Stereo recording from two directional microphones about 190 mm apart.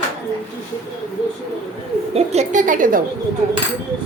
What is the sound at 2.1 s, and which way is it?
Speech, 35° right (ahead or behind).